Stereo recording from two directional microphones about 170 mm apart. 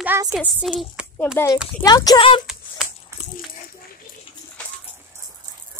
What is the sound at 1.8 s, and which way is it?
Speech, 20° left (ahead or behind).